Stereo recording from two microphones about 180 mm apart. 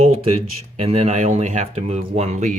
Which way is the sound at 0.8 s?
35° right (ahead or behind).